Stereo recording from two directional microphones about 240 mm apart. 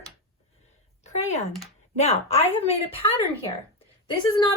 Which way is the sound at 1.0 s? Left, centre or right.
Left.